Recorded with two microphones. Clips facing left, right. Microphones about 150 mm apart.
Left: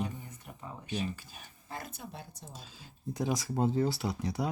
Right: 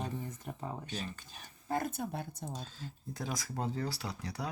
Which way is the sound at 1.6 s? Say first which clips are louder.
Right 9 dB; 50° right (ahead or behind).